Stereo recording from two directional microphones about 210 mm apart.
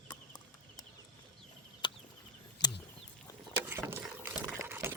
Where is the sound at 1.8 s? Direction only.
25° left (ahead or behind).